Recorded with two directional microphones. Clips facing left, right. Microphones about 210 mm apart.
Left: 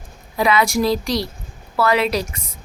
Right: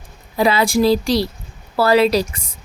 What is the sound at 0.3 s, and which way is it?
Speech, 30° right (ahead or behind).